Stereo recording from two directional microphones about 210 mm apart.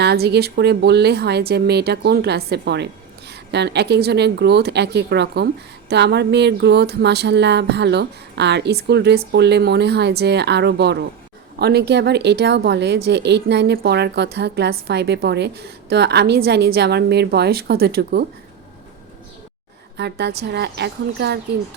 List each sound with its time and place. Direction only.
0.0 s a woman's voice: 50° right (ahead or behind)
20.0 s a woman's voice: 55° right (ahead or behind)